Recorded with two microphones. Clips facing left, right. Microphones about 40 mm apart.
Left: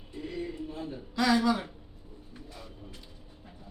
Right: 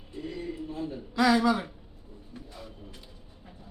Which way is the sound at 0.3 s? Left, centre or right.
Centre.